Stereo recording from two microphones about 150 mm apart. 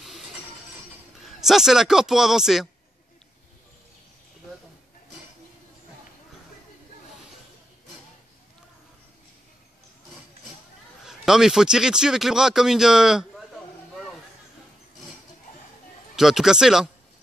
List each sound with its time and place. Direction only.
1.2 s a man's voice: centre (ahead or behind)
11.1 s a man's voice: 5° right (ahead or behind)
16.2 s a man's voice: centre (ahead or behind)